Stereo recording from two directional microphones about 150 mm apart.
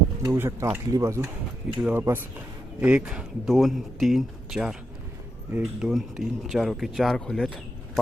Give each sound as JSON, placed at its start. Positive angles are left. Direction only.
{"t": 0.2, "sound": "speech", "side_deg": -15}